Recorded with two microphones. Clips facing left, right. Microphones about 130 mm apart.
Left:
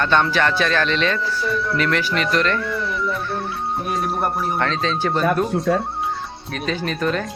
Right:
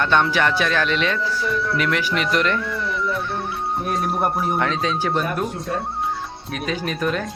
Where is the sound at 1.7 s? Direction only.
10° right (ahead or behind).